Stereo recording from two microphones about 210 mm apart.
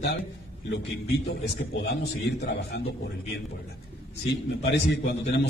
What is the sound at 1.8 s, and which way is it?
A man's voice, 55° left (ahead or behind).